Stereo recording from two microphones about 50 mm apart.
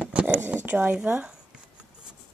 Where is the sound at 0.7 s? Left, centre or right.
Centre.